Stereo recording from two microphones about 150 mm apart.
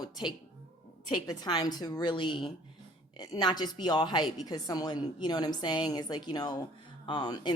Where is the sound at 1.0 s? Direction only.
25° left (ahead or behind).